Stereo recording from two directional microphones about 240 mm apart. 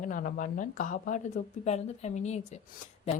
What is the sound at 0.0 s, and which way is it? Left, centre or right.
A woman's voice, left.